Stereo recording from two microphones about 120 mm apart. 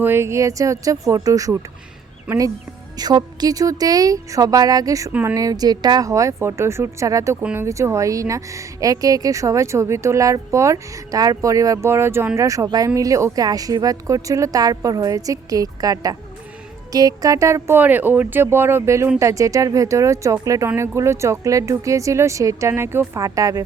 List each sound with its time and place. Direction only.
0.0 s speech: 20° right (ahead or behind)
2.3 s speech: 10° right (ahead or behind)
3.0 s speech: 35° right (ahead or behind)
7.4 s speech: 15° right (ahead or behind)
7.7 s speech: 25° right (ahead or behind)